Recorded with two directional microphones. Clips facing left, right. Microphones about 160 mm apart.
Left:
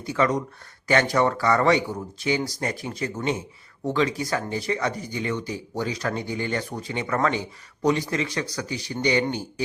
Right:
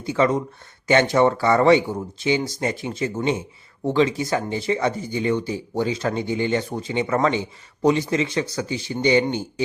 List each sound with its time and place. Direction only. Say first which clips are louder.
0.0 s speech: right 3 dB; 25° right (ahead or behind)